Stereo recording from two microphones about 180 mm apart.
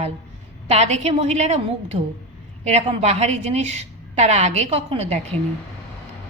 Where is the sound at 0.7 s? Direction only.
40° right (ahead or behind).